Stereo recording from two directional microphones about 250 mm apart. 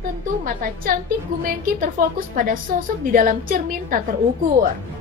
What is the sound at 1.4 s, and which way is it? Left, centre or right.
A woman's voice, right.